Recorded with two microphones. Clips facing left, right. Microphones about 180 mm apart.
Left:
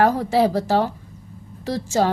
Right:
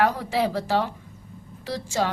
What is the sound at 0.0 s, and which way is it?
A woman's voice, 40° left (ahead or behind).